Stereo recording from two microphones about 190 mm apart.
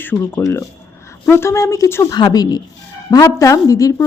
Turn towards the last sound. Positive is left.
turn(degrees=15)  # may be behind; listen again after turning